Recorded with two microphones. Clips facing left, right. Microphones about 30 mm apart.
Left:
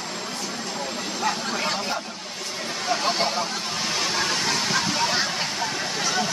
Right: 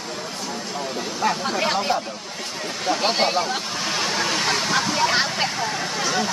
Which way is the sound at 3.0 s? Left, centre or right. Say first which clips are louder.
Right 5 dB; right.